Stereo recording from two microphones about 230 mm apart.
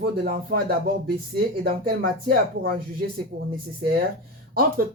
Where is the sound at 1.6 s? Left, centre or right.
Right.